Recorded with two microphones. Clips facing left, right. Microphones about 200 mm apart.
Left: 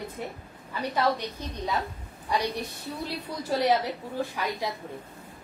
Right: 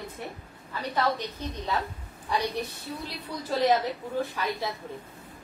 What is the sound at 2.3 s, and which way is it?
Speech, 10° left (ahead or behind).